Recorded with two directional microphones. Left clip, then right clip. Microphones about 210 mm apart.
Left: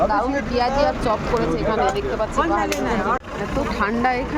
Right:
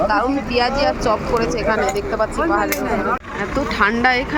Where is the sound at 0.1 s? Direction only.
10° right (ahead or behind).